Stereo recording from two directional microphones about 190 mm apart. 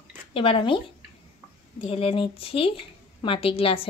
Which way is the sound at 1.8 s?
30° left (ahead or behind).